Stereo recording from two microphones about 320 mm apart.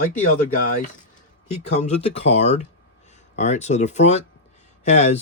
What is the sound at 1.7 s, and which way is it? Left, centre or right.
Speech, left.